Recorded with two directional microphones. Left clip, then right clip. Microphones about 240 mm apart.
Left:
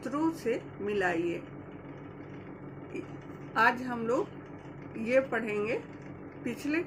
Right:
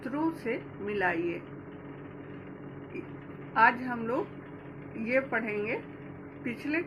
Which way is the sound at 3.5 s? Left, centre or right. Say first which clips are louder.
Right 2 dB; centre.